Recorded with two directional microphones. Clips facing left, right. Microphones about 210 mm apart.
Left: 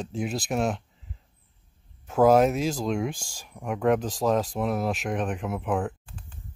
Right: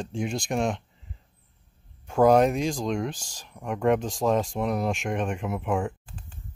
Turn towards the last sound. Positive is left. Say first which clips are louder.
# even
turn(degrees=0)  # may be behind; listen again after turning